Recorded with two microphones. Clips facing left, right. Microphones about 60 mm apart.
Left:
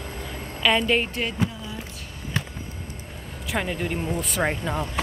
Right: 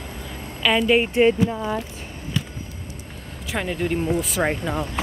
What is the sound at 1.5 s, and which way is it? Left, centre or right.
Speech, right.